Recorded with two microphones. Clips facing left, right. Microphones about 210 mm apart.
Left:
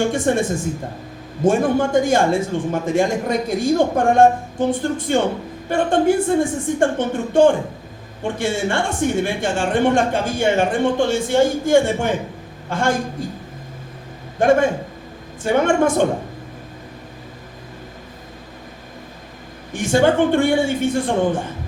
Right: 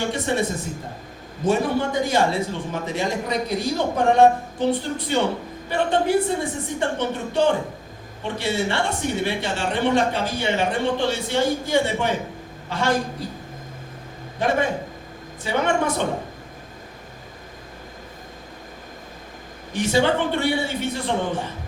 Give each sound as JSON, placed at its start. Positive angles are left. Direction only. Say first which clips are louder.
{"t": 0.0, "sound": "a woman's voice", "louder": "left 5 dB", "side_deg": 50}
{"t": 1.5, "sound": "a woman's voice", "louder": "left 4 dB", "side_deg": 50}
{"t": 14.3, "sound": "a woman's voice", "louder": "left 7 dB", "side_deg": 50}
{"t": 19.7, "sound": "a woman's voice", "louder": "left 4 dB", "side_deg": 50}